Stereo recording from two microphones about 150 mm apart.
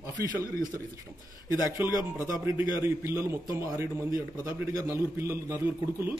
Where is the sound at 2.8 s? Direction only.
15° right (ahead or behind).